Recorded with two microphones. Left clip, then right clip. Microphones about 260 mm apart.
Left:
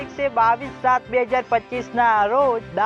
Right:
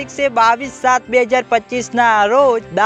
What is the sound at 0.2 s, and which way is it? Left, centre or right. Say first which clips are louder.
Music: right 5 dB; right.